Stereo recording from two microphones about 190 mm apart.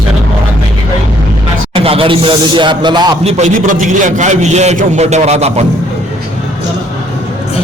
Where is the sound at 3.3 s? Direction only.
40° right (ahead or behind).